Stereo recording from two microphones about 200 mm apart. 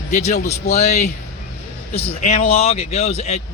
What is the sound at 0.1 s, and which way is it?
A man's voice, 35° left (ahead or behind).